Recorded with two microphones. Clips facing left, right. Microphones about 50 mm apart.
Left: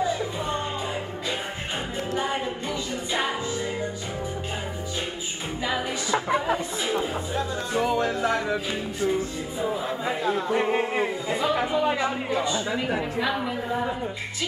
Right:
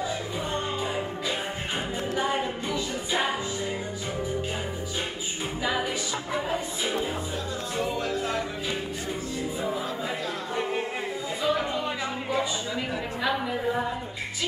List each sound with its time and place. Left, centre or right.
10.2 s chatter: left